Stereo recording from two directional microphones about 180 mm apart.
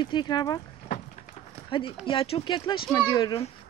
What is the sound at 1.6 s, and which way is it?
Speech, 30° left (ahead or behind).